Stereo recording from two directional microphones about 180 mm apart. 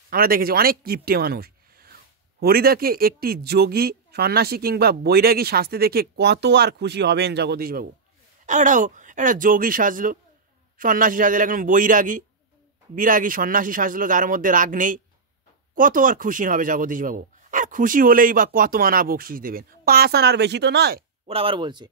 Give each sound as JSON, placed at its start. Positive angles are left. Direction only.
{"t": 0.1, "sound": "speech", "side_deg": -55}
{"t": 8.5, "sound": "speech", "side_deg": -45}
{"t": 21.3, "sound": "speech", "side_deg": -30}